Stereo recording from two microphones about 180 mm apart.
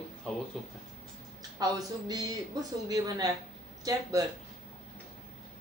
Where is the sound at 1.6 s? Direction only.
20° right (ahead or behind).